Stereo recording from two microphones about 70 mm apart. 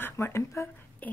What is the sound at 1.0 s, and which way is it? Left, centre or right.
Speech, left.